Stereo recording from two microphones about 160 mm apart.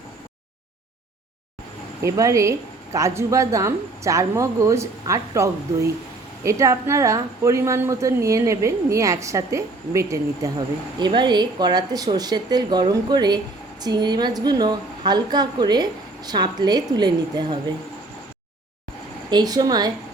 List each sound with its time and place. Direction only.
2.0 s a woman's voice: 20° right (ahead or behind)
19.3 s a woman's voice: 25° right (ahead or behind)